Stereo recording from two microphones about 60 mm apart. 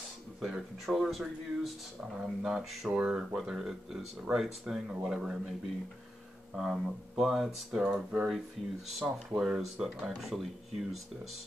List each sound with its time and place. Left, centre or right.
0.4 s speech: centre
2.9 s speech: centre
6.5 s speech: centre
7.7 s speech: centre
9.9 s speech: centre